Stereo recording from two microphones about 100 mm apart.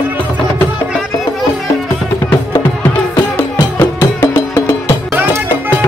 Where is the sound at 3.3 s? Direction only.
20° left (ahead or behind).